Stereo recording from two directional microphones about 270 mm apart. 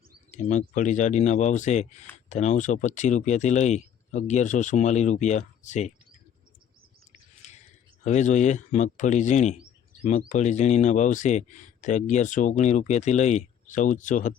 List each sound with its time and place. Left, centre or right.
0.3 s speech: left
7.4 s a sound: left
8.0 s speech: left